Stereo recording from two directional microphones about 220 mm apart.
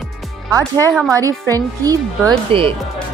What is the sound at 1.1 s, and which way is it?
Speech, 15° right (ahead or behind).